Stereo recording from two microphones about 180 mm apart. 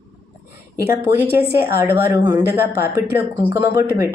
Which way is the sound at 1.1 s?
10° right (ahead or behind).